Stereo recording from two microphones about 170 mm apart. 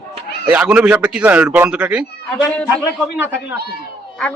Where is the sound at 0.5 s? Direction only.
5° right (ahead or behind).